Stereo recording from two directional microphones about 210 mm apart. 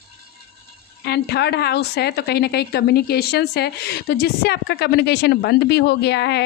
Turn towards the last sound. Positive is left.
turn(degrees=55)  # may be behind; listen again after turning